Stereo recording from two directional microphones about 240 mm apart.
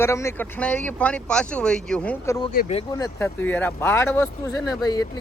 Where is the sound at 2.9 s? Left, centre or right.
Centre.